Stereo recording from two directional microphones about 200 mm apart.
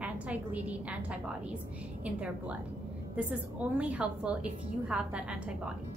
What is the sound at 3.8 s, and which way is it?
A woman's voice, 5° right (ahead or behind).